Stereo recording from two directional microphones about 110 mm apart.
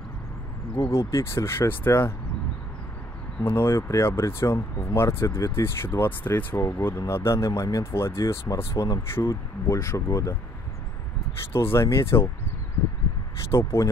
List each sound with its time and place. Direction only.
0.8 s speech: 25° left (ahead or behind)
3.4 s speech: 20° left (ahead or behind)
11.5 s speech: 25° left (ahead or behind)
13.5 s speech: 25° left (ahead or behind)